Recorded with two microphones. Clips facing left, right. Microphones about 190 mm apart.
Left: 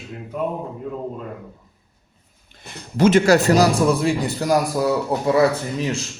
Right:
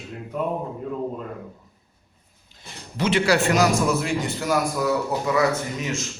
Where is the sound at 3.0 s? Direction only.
45° left (ahead or behind).